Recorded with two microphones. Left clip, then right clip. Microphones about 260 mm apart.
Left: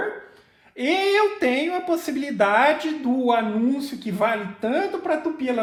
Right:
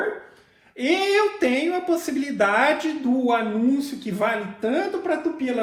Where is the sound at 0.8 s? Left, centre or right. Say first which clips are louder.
Even; left.